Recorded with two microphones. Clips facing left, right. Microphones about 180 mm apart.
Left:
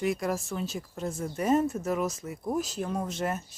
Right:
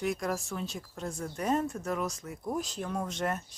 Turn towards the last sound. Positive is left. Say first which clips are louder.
# left 2 dB
turn(degrees=5)  # may be behind; listen again after turning